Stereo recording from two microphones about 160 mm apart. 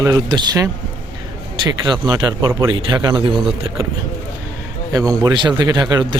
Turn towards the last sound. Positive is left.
turn(degrees=-25)  # may be behind; listen again after turning